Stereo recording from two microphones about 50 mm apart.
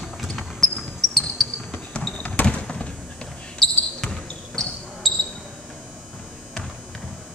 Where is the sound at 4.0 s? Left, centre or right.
Centre.